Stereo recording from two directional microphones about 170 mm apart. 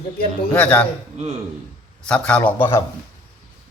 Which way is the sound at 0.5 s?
10° left (ahead or behind).